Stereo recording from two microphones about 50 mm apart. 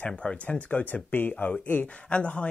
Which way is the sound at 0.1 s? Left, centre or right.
Left.